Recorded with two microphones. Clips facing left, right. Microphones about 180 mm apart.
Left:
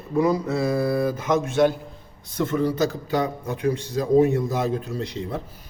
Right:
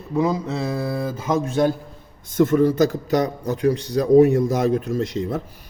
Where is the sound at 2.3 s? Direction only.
50° right (ahead or behind).